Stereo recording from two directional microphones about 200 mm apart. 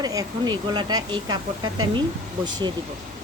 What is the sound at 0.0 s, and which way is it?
Speech, 20° right (ahead or behind).